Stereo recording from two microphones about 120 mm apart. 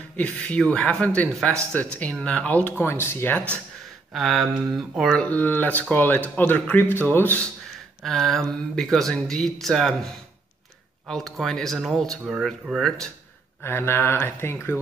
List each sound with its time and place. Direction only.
0.2 s speech: 10° left (ahead or behind)
4.1 s speech: centre (ahead or behind)
5.2 s speech: 15° left (ahead or behind)
8.0 s speech: centre (ahead or behind)
11.1 s speech: 5° left (ahead or behind)
13.6 s speech: 20° left (ahead or behind)